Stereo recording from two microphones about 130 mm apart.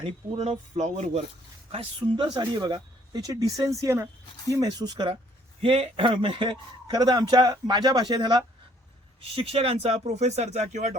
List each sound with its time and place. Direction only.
0.0 s speech: 50° right (ahead or behind); by 1.2 s 65° right (ahead or behind)
1.7 s speech: 40° right (ahead or behind)
5.6 s speech: 45° right (ahead or behind)
9.3 s speech: 45° right (ahead or behind); by 10.9 s 65° right (ahead or behind)